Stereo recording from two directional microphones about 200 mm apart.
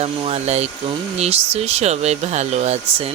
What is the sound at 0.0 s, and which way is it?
Speech, 30° right (ahead or behind).